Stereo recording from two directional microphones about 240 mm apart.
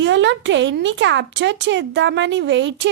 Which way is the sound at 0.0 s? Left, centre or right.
Right.